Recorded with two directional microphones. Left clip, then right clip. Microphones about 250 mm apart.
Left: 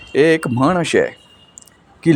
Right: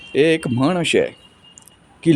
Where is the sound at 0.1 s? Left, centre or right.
Centre.